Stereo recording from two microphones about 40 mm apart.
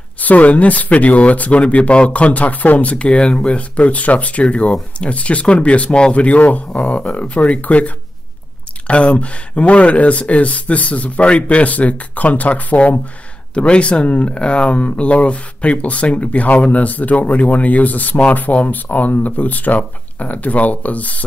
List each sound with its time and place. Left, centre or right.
0.2 s speech: left